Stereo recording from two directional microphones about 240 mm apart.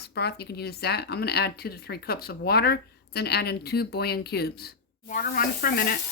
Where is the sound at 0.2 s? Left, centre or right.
Left.